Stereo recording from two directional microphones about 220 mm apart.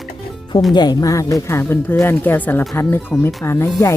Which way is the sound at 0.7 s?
15° left (ahead or behind).